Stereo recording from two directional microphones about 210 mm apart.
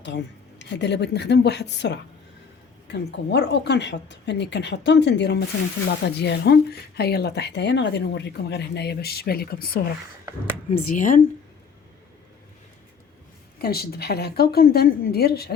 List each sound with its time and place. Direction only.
0.0 s a woman's voice: 55° left (ahead or behind); by 11.2 s 40° left (ahead or behind)
13.6 s speech: 45° left (ahead or behind)